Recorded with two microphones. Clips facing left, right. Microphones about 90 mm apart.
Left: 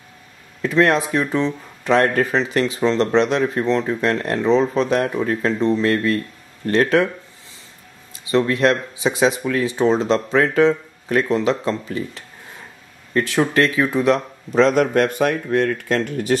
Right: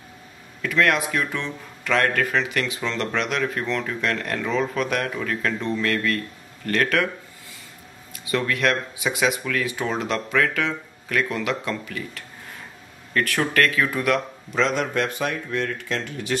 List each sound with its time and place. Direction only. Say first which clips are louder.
0.6 s speech: left 5 dB; 30° left (ahead or behind)
8.3 s speech: left 6 dB; 30° left (ahead or behind)
14.6 s speech: left 7 dB; 45° left (ahead or behind)